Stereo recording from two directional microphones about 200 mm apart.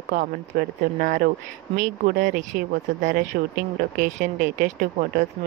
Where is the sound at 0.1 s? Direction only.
45° right (ahead or behind).